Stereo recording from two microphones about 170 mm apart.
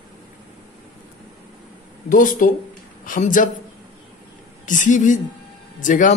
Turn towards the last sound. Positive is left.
turn(degrees=50)  # may be behind; listen again after turning